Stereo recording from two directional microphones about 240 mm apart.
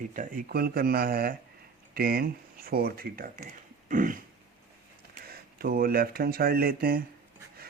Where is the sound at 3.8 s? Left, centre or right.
Right.